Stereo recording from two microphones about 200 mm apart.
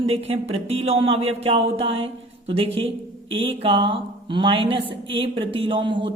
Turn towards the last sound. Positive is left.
turn(degrees=-25)  # may be behind; listen again after turning